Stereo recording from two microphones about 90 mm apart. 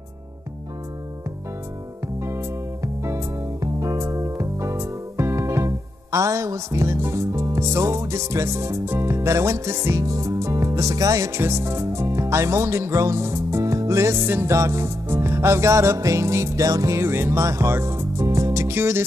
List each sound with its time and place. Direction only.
2.2 s music: 30° right (ahead or behind)